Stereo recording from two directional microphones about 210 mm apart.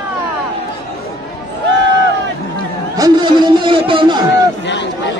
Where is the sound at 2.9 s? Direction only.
20° right (ahead or behind).